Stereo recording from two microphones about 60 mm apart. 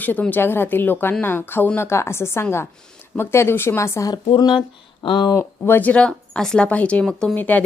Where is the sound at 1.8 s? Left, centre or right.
Left.